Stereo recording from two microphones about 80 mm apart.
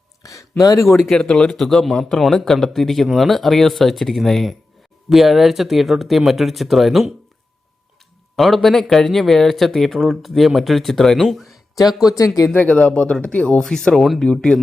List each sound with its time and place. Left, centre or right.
0.2 s a sound: left
0.6 s speech: left
0.9 s speech: centre
8.4 s speech: centre
11.9 s speech: left
12.5 s speech: centre